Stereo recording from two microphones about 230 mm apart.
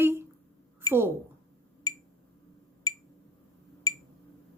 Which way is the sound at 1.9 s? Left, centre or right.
Centre.